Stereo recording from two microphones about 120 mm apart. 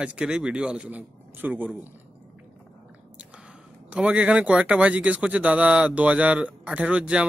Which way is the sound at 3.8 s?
10° right (ahead or behind).